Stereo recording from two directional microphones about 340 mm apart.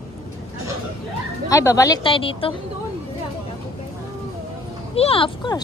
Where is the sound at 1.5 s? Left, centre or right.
Centre.